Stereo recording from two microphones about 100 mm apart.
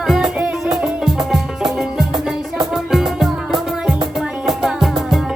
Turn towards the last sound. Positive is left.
turn(degrees=-5)  # may be behind; listen again after turning